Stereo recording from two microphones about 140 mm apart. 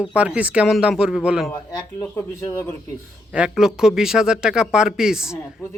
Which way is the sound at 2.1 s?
15° left (ahead or behind).